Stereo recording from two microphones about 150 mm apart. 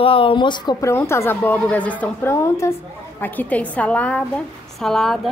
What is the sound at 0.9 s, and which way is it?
A woman's voice, 15° left (ahead or behind).